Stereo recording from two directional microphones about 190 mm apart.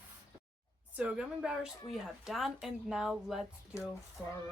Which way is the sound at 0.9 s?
5° right (ahead or behind).